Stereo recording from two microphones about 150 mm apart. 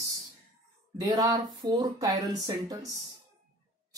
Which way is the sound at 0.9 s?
25° right (ahead or behind).